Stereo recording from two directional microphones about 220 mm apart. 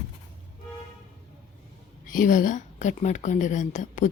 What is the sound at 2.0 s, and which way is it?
A woman's voice, 40° left (ahead or behind).